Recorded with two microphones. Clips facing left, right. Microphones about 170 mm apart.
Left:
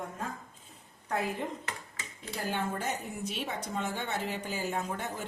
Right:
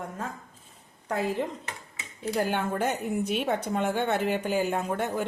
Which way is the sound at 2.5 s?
60° right (ahead or behind).